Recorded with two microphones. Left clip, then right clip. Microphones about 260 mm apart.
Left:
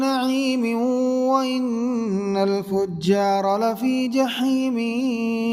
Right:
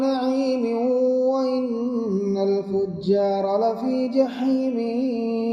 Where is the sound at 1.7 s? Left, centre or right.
Left.